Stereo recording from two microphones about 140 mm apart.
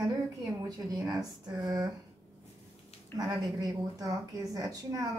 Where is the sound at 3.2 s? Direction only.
30° right (ahead or behind).